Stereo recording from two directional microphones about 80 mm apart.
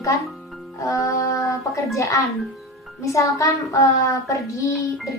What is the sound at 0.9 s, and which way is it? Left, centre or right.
A woman's voice, left.